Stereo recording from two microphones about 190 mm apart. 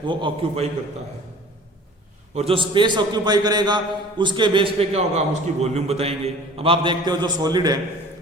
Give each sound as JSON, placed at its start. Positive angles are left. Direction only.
{"t": 0.0, "sound": "a man's voice", "side_deg": -25}
{"t": 2.3, "sound": "a man's voice", "side_deg": -30}